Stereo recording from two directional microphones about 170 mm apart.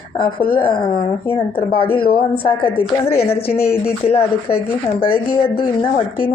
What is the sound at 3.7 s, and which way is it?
A woman's voice, 35° left (ahead or behind).